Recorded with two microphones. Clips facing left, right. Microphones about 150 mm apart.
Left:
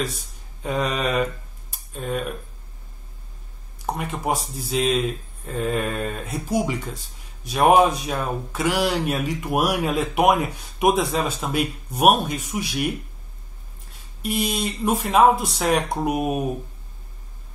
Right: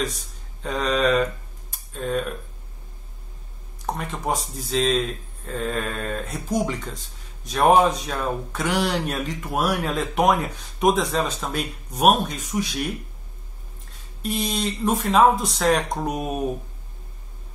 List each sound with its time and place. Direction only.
0.6 s speech: 10° left (ahead or behind)
3.8 s speech: 10° left (ahead or behind)
14.2 s speech: 10° left (ahead or behind)